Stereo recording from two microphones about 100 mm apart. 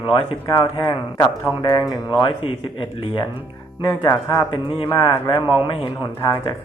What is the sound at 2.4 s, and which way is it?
Speech, 65° left (ahead or behind).